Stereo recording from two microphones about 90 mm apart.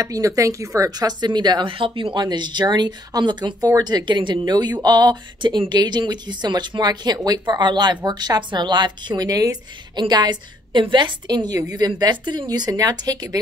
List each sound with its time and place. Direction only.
0.0 s speech: 40° right (ahead or behind); by 1.7 s 55° right (ahead or behind)
1.7 s speech: 80° right
2.2 s speech: 55° right (ahead or behind)